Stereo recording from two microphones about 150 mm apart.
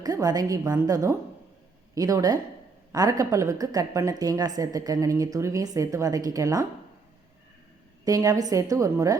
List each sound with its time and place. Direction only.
0.0 s a woman's voice: 25° right (ahead or behind)
8.0 s a woman's voice: 25° right (ahead or behind)